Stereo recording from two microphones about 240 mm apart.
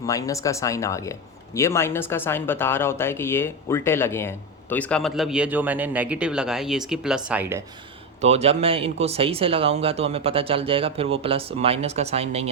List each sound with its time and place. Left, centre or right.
0.0 s speech: centre
8.2 s speech: right